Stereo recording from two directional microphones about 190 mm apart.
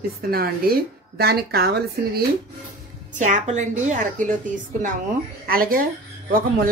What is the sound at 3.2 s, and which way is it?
Speech, 40° right (ahead or behind).